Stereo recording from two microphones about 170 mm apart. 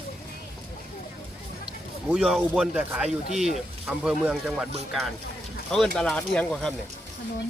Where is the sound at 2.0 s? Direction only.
Centre (ahead or behind).